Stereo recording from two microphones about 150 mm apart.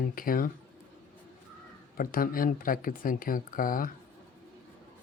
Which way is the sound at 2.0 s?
70° left (ahead or behind).